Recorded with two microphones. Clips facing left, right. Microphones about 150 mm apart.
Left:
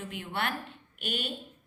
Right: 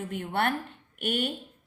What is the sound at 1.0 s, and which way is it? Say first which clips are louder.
Speech: right 7 dB; 55° right (ahead or behind).